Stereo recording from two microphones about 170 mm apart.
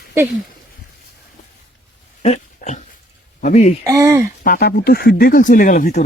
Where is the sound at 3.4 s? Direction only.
50° left (ahead or behind).